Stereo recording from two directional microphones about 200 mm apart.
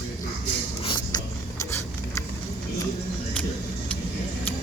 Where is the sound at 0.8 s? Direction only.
20° left (ahead or behind).